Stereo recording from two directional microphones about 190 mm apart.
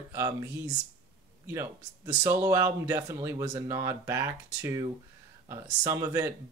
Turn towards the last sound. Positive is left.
turn(degrees=-15)  # may be behind; listen again after turning